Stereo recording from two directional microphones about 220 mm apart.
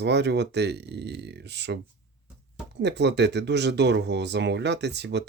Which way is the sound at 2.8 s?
50° right (ahead or behind).